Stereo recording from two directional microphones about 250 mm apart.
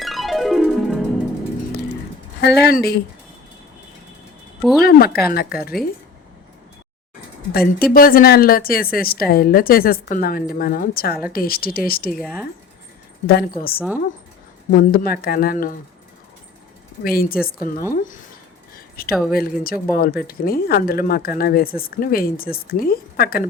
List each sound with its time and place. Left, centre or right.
0.0 s music: centre
2.4 s speech: left
4.8 s speech: left
7.5 s speech: left
13.2 s speech: left
17.0 s speech: left